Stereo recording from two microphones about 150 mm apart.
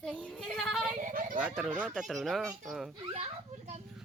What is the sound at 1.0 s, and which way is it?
Speech, 65° right (ahead or behind).